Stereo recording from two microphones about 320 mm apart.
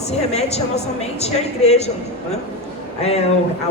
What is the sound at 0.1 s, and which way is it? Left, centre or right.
A man's voice, centre.